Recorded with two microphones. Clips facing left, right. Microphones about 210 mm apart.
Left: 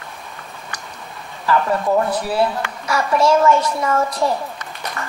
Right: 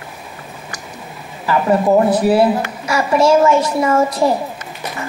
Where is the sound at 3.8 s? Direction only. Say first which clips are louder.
Right 5 dB; 25° right (ahead or behind).